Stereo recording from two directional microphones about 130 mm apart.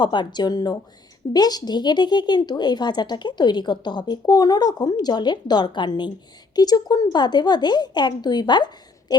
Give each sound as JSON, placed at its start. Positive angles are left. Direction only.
{"t": 0.0, "sound": "speech", "side_deg": 35}